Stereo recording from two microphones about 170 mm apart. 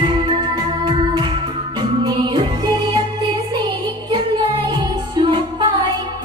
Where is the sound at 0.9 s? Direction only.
35° right (ahead or behind).